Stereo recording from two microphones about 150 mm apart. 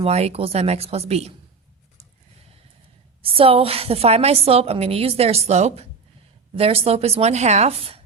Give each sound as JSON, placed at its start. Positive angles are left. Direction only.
{"t": 0.0, "sound": "a woman's voice", "side_deg": -45}
{"t": 3.2, "sound": "a woman's voice", "side_deg": -40}